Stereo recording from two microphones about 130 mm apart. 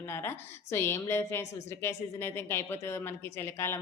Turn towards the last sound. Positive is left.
turn(degrees=20)  # may be behind; listen again after turning